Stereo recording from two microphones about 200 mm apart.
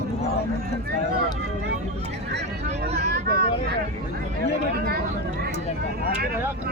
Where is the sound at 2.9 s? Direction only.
55° right (ahead or behind).